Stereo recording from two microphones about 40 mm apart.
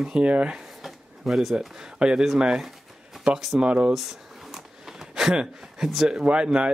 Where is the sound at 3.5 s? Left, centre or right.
Right.